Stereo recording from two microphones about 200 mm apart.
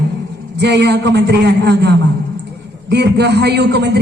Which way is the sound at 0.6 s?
55° right (ahead or behind).